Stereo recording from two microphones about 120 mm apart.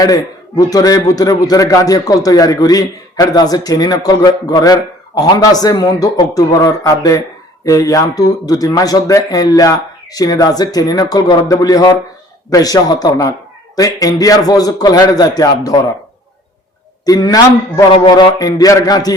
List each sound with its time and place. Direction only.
0.0 s a man's voice: 30° left (ahead or behind)
17.1 s a man's voice: 35° left (ahead or behind)